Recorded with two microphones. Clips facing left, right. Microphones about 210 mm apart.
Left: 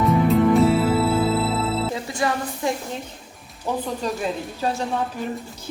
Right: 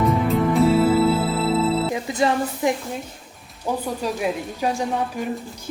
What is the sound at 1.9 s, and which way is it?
Speech, 20° right (ahead or behind).